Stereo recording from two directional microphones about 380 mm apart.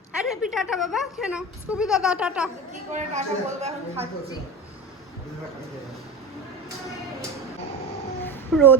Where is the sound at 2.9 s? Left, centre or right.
Centre.